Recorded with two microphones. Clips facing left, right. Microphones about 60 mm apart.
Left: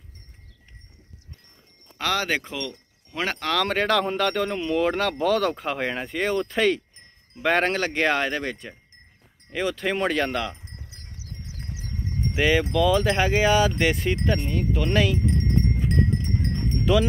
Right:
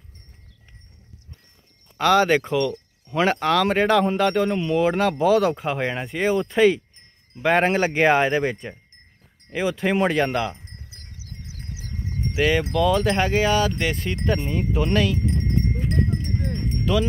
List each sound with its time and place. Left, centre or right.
1.9 s speech: centre
7.7 s speech: centre
10.8 s clip-clop: centre
12.6 s speech: centre
14.2 s speech: centre
15.2 s a sound: centre
16.8 s speech: centre